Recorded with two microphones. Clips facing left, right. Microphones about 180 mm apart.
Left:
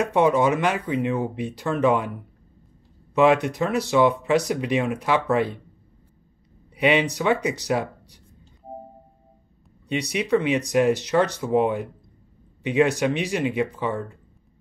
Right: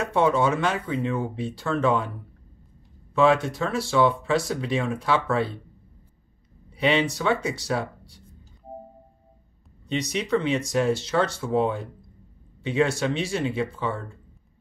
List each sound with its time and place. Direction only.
0.0 s speech: 15° left (ahead or behind)
3.2 s speech: 15° left (ahead or behind)
6.7 s speech: 15° left (ahead or behind)
9.8 s speech: 10° left (ahead or behind)